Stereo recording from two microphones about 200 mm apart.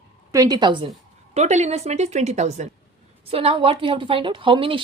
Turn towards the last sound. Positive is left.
turn(degrees=-25)  # may be behind; listen again after turning